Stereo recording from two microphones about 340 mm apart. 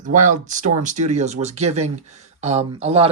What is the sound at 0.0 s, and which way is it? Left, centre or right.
Speech, right.